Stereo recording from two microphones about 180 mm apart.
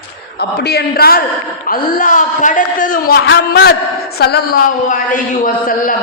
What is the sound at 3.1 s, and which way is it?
A man's voice, 65° left (ahead or behind).